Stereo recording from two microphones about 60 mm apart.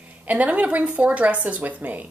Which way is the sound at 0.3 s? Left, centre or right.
Right.